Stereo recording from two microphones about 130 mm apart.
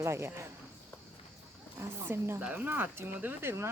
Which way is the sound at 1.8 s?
20° right (ahead or behind).